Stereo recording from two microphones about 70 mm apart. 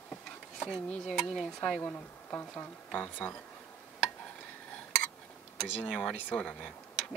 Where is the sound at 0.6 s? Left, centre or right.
Centre.